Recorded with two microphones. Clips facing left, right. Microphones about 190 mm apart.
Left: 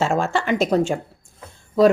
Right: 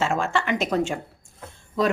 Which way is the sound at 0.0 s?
35° left (ahead or behind).